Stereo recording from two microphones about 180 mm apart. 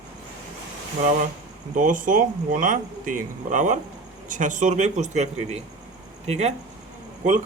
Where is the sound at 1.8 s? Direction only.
45° right (ahead or behind).